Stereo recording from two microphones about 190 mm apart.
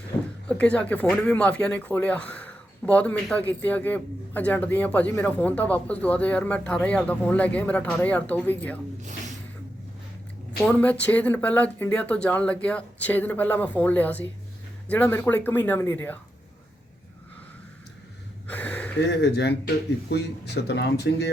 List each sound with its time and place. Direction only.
0.4 s speech: 5° left (ahead or behind)
10.6 s speech: 5° left (ahead or behind)
18.4 s gasp: 5° left (ahead or behind)
18.9 s speech: 65° left (ahead or behind)